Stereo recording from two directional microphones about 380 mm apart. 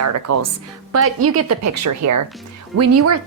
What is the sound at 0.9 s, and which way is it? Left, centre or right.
A woman's voice, right.